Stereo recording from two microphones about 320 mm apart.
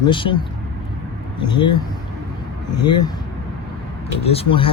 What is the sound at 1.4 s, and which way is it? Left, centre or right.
Speech, centre.